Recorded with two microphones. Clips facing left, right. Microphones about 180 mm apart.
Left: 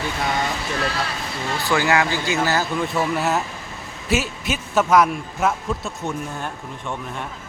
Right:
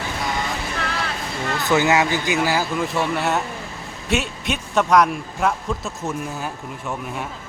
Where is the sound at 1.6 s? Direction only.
20° right (ahead or behind).